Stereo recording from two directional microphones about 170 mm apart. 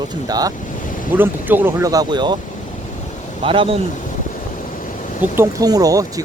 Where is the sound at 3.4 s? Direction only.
30° right (ahead or behind).